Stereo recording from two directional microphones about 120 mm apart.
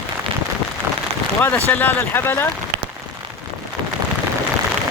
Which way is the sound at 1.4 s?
15° left (ahead or behind).